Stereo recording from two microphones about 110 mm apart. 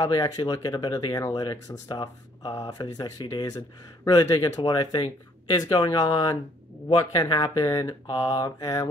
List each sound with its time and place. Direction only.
0.0 s speech: 35° left (ahead or behind)